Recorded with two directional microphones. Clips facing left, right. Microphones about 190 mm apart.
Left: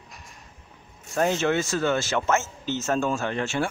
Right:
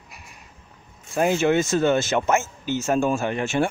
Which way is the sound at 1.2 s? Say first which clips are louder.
Right 3 dB; 10° right (ahead or behind).